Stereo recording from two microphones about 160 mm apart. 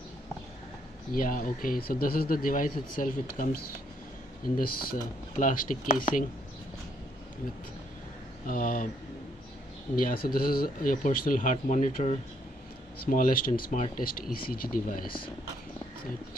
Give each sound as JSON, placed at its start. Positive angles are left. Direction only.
{"t": 1.1, "sound": "speech", "side_deg": 60}
{"t": 8.5, "sound": "speech", "side_deg": 55}
{"t": 9.9, "sound": "speech", "side_deg": 65}
{"t": 13.0, "sound": "speech", "side_deg": 60}
{"t": 13.9, "sound": "speech", "side_deg": 65}